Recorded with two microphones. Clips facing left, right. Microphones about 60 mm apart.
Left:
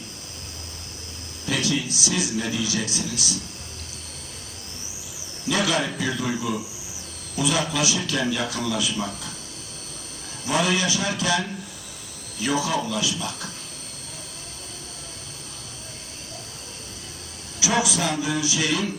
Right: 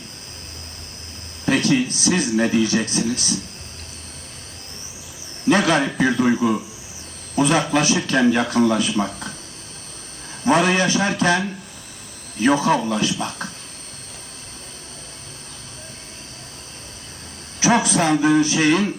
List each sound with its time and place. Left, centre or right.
1.5 s a man's voice: right
5.5 s a man's voice: right
10.4 s a man's voice: right
17.6 s a man's voice: right